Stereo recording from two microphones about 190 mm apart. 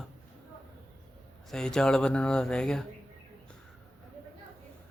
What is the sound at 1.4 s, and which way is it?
Speech, 5° left (ahead or behind).